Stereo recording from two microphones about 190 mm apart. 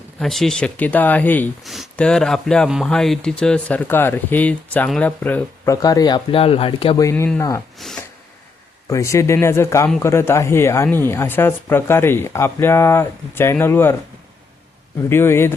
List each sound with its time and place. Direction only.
0.2 s speech: centre (ahead or behind)
7.8 s speech: centre (ahead or behind)
8.9 s speech: 15° left (ahead or behind)
15.1 s speech: 10° left (ahead or behind)